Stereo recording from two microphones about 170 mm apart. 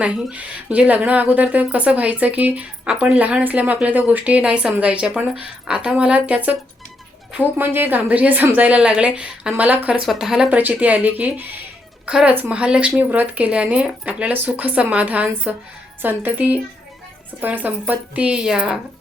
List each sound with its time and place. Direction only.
0.0 s speech: 5° right (ahead or behind)